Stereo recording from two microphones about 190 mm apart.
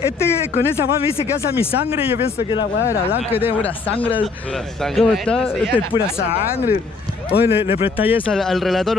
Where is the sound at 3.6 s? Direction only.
10° left (ahead or behind).